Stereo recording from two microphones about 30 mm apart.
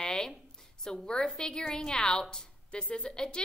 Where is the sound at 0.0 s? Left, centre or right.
Centre.